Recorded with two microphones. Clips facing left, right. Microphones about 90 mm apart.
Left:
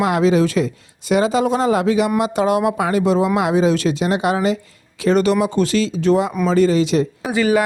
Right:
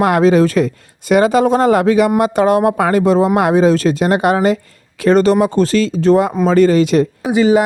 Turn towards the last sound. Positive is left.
turn(degrees=-20)  # may be behind; listen again after turning